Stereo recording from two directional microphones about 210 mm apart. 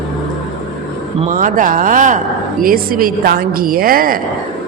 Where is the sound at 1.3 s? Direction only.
40° right (ahead or behind).